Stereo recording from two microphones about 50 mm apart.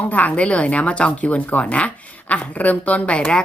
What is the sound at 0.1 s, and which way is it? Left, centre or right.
A woman's voice, left.